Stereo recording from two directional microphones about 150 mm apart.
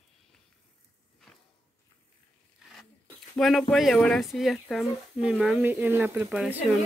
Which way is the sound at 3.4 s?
Centre (ahead or behind).